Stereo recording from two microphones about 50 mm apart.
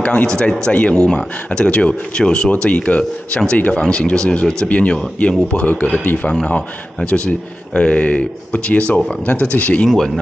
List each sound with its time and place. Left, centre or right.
0.0 s speech: left
0.3 s speech: centre
9.8 s speech: centre